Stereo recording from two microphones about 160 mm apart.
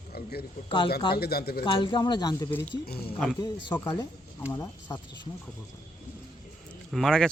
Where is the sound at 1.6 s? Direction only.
30° left (ahead or behind).